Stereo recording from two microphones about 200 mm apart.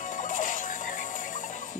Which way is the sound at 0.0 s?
40° left (ahead or behind).